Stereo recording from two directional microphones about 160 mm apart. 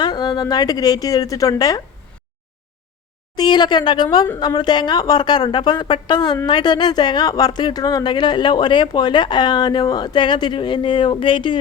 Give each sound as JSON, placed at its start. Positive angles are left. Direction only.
{"t": 0.0, "sound": "speech", "side_deg": 25}
{"t": 3.3, "sound": "speech", "side_deg": 25}